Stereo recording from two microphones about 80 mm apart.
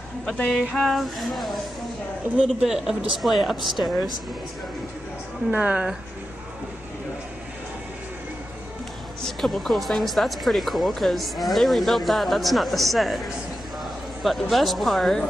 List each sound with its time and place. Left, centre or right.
0.2 s speech: centre
5.5 s a woman's voice: centre
9.4 s speech: centre
14.2 s speech: centre